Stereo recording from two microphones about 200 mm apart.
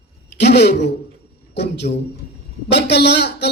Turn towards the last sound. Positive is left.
turn(degrees=60)  # may be behind; listen again after turning